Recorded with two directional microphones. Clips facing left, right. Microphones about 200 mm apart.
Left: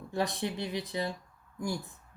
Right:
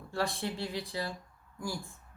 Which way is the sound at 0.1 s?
20° left (ahead or behind).